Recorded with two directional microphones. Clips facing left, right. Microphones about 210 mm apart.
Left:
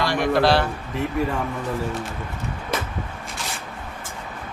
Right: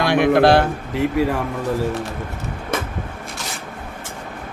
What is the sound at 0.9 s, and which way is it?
Speech, 75° right (ahead or behind).